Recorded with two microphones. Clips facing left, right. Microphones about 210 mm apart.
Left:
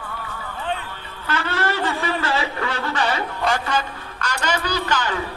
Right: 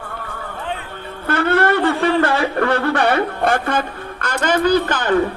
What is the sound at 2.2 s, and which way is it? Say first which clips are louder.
A man's voice: right 7 dB; 60° right (ahead or behind).